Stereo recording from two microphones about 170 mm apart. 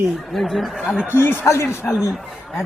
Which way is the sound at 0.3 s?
Centre (ahead or behind).